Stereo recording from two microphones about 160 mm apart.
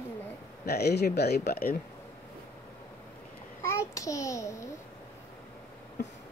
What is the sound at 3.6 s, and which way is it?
A child's voice, 20° left (ahead or behind).